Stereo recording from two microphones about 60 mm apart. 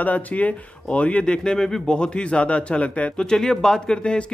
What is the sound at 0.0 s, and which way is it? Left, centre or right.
Speech, left.